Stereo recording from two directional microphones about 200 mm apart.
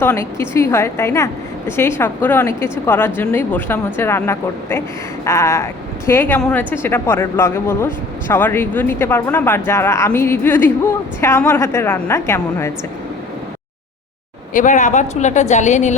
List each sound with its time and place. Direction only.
0.0 s a woman's voice: 10° left (ahead or behind)
14.5 s speech: 40° left (ahead or behind)